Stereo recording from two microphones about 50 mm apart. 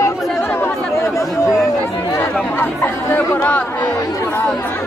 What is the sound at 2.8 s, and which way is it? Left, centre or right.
Chatter, left.